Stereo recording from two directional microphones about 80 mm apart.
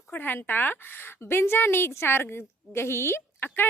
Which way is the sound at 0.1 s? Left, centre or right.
Left.